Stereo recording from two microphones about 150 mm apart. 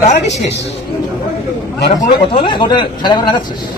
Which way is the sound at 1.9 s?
35° left (ahead or behind).